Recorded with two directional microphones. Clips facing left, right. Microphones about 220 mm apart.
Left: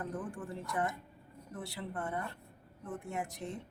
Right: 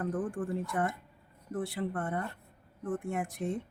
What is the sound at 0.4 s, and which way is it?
Speech, 50° right (ahead or behind).